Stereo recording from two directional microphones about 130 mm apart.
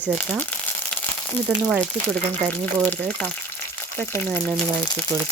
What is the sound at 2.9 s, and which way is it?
Speech, 10° left (ahead or behind).